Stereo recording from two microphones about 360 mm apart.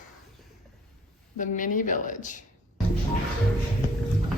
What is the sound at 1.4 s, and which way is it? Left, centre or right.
A woman's voice, left.